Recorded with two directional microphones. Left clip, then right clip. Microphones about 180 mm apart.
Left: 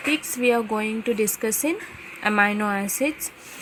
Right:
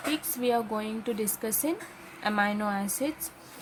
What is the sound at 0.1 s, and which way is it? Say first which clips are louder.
A woman's voice: left 7 dB; 15° left (ahead or behind).